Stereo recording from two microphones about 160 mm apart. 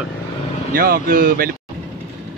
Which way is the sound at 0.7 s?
60° right (ahead or behind).